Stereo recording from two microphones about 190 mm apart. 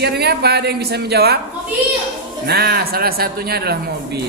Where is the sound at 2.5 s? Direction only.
55° right (ahead or behind).